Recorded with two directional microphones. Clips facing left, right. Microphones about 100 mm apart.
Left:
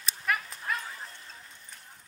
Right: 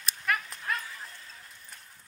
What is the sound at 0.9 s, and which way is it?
Bow-wow, 30° left (ahead or behind).